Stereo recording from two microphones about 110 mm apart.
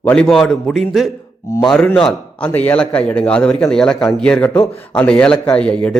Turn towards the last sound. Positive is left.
turn(degrees=10)  # may be behind; listen again after turning